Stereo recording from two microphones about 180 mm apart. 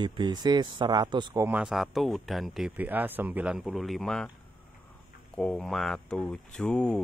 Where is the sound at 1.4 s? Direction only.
5° right (ahead or behind).